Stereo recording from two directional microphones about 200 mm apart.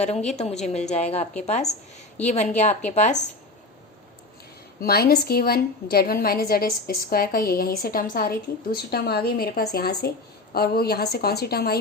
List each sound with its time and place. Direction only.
0.3 s a woman's voice: 35° left (ahead or behind)
4.8 s a woman's voice: 50° left (ahead or behind)